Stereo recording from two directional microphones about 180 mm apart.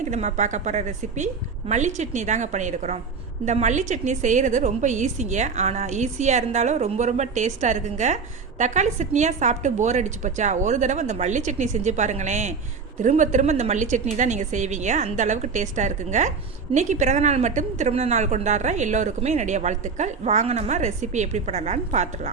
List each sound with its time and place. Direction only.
0.0 s a woman's voice: 40° right (ahead or behind)